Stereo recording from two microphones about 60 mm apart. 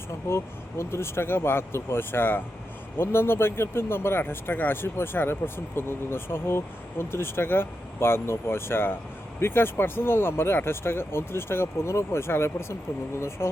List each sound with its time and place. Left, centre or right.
0.3 s speech: left